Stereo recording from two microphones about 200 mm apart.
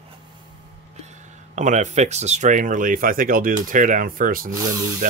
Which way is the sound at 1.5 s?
35° right (ahead or behind).